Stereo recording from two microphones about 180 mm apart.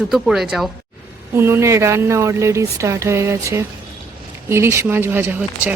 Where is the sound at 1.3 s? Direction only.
15° right (ahead or behind).